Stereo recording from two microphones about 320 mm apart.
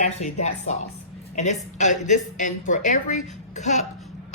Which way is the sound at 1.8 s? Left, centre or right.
Left.